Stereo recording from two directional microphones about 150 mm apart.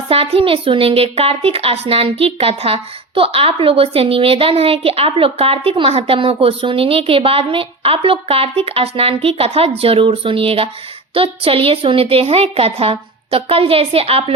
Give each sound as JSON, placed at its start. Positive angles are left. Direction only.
{"t": 0.1, "sound": "a woman's voice", "side_deg": -40}